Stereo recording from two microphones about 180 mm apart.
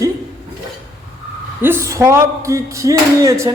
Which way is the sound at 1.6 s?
15° right (ahead or behind).